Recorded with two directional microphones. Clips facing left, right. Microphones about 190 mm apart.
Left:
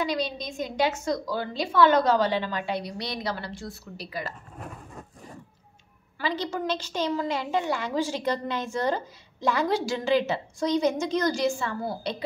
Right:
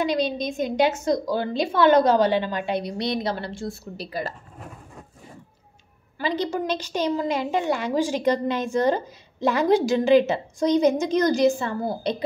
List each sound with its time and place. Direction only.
0.0 s a woman's voice: 20° right (ahead or behind)
6.1 s a woman's voice: 20° right (ahead or behind)